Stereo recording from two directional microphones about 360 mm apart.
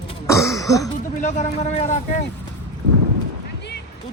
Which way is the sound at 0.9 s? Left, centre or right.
Centre.